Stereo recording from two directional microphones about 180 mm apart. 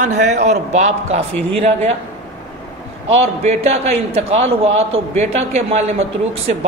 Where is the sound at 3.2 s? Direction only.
35° right (ahead or behind).